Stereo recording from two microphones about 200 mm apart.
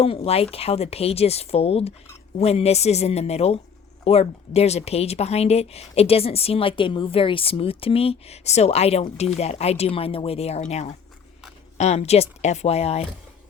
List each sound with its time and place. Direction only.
0.0 s speech: 30° left (ahead or behind)